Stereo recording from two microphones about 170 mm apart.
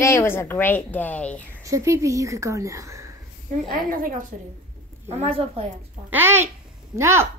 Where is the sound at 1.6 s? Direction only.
15° right (ahead or behind).